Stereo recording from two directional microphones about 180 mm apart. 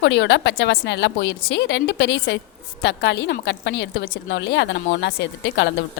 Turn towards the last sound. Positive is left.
turn(degrees=80)